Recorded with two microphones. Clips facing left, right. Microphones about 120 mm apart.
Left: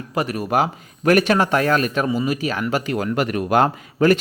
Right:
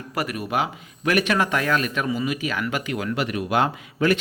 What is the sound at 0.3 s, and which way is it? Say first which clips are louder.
Speech: left 6 dB; 40° left (ahead or behind).